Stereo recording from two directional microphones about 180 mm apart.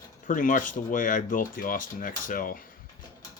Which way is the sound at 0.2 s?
45° left (ahead or behind).